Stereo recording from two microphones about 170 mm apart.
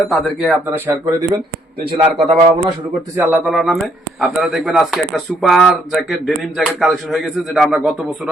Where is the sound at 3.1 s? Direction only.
10° right (ahead or behind).